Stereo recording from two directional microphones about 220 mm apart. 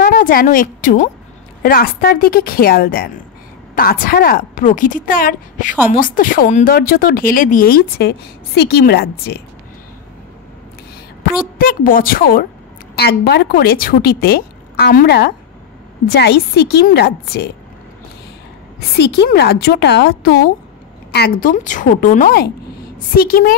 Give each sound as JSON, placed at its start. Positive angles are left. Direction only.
{"t": 0.0, "sound": "a woman's voice", "side_deg": 40}
{"t": 11.5, "sound": "a woman's voice", "side_deg": 40}
{"t": 18.8, "sound": "a woman's voice", "side_deg": 50}